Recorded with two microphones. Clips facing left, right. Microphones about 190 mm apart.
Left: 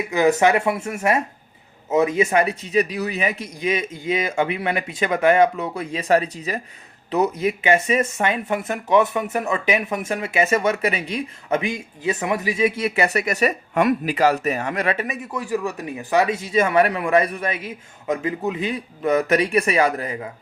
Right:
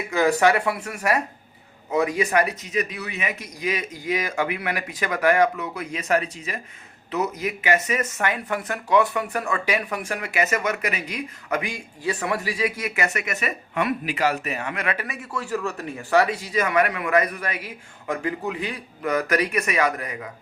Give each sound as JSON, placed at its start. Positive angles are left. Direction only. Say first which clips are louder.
{"t": 0.1, "sound": "speech", "louder": "left 2 dB", "side_deg": 20}
{"t": 14.9, "sound": "speech", "louder": "left 4 dB", "side_deg": 20}